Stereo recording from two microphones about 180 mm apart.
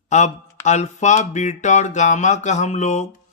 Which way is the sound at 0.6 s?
40° left (ahead or behind).